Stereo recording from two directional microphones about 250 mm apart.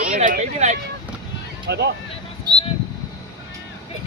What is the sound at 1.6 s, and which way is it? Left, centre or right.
Speech, right.